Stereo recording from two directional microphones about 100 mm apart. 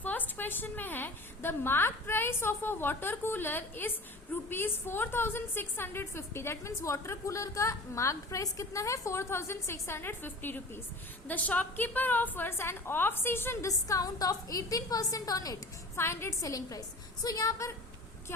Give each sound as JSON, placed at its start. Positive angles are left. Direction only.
{"t": 0.0, "sound": "a woman's voice", "side_deg": 15}
{"t": 16.0, "sound": "a woman's voice", "side_deg": 25}
{"t": 16.5, "sound": "a woman's voice", "side_deg": 35}